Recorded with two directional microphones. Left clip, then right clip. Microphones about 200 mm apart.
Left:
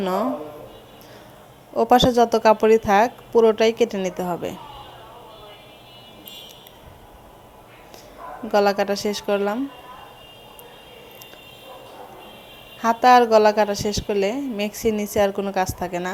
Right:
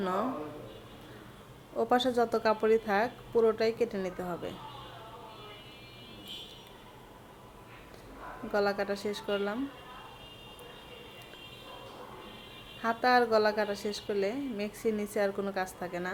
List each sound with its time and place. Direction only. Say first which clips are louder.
0.0 s speech: left 9 dB; 25° left (ahead or behind)
1.7 s a woman's voice: left 12 dB; 30° left (ahead or behind)
8.5 s a woman's voice: left 11 dB; 35° left (ahead or behind)
12.8 s a woman's voice: left 12 dB; 35° left (ahead or behind)